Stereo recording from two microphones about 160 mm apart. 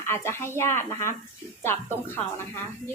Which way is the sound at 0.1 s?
15° left (ahead or behind).